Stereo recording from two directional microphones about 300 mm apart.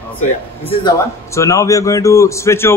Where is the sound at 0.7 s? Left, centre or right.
Centre.